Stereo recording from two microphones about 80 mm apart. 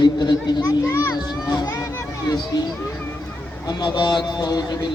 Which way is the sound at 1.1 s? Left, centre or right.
Left.